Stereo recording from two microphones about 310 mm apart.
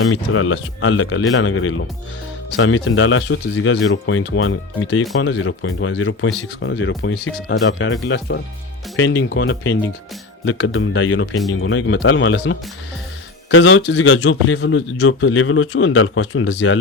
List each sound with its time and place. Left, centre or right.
0.0 s a man's voice: left